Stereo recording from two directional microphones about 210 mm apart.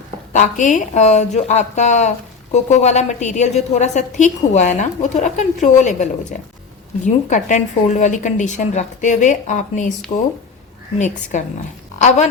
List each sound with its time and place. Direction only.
0.3 s a woman's voice: 35° left (ahead or behind)
10.9 s a woman's voice: 35° left (ahead or behind)